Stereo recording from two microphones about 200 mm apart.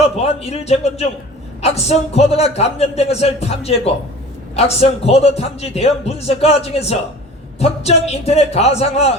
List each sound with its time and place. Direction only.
0.0 s a man's voice: 30° left (ahead or behind)